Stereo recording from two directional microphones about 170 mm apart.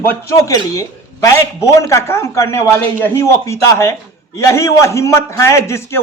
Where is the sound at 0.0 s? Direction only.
15° left (ahead or behind).